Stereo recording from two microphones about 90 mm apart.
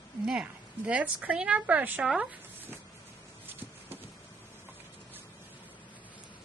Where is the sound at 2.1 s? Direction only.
20° right (ahead or behind).